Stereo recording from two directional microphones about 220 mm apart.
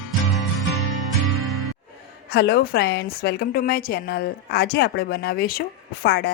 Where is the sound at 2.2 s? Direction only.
50° left (ahead or behind).